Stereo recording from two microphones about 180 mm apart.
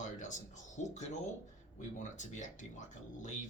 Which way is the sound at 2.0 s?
45° left (ahead or behind).